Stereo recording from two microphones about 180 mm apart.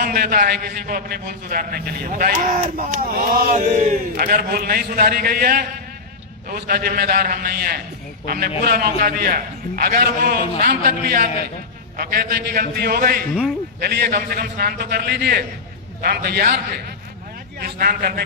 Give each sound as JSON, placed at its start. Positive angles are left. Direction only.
{"t": 0.0, "sound": "a man's voice", "side_deg": -55}
{"t": 17.6, "sound": "a man's voice", "side_deg": -55}